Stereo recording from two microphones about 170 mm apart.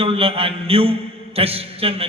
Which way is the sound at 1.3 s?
35° right (ahead or behind).